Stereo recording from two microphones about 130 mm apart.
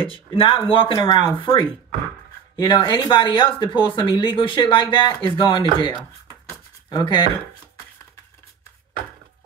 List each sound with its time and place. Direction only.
0.0 s speech: 40° left (ahead or behind)
0.9 s speech: 25° left (ahead or behind)
1.4 s speech: 40° left (ahead or behind)